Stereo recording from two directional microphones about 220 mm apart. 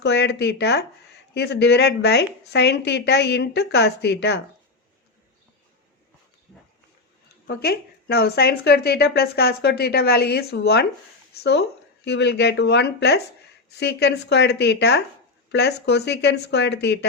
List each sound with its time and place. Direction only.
0.0 s speech: 50° left (ahead or behind)
7.4 s speech: 45° left (ahead or behind)